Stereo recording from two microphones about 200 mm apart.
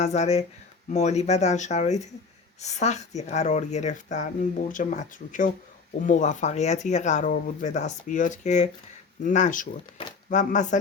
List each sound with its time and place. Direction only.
0.0 s speech: 35° left (ahead or behind)